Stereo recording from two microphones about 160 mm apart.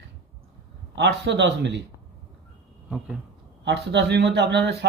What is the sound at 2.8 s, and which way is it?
Speech, 5° right (ahead or behind).